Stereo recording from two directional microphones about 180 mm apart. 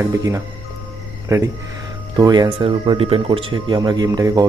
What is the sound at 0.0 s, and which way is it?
Speech, 15° right (ahead or behind).